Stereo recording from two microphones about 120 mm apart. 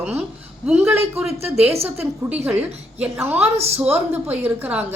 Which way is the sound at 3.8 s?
15° right (ahead or behind).